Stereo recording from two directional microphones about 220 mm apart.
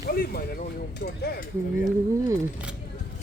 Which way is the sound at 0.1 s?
40° left (ahead or behind).